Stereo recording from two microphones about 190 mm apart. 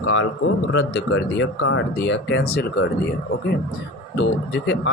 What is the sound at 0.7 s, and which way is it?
A man's voice, 70° left (ahead or behind).